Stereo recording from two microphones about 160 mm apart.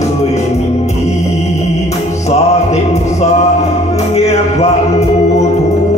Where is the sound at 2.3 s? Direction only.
45° left (ahead or behind).